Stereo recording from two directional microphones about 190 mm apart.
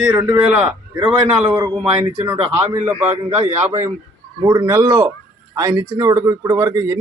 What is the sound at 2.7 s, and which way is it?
Speech, 10° right (ahead or behind).